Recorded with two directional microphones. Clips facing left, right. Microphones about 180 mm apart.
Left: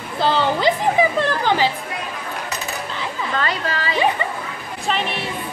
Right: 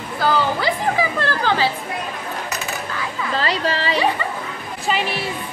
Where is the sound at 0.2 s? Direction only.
25° left (ahead or behind).